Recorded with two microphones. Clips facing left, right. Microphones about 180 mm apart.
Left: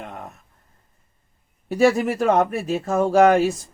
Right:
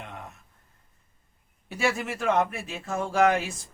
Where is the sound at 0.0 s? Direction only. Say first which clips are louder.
Left 6 dB; 45° left (ahead or behind).